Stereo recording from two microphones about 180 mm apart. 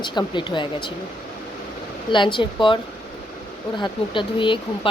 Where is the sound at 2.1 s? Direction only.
25° left (ahead or behind).